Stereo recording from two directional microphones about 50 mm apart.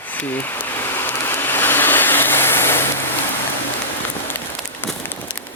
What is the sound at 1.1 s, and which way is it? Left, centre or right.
Vehicle, left.